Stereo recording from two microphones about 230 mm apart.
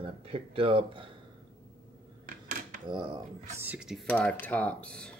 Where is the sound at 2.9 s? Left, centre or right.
Centre.